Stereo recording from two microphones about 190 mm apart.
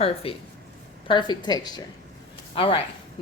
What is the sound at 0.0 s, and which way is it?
A woman's voice, 30° left (ahead or behind).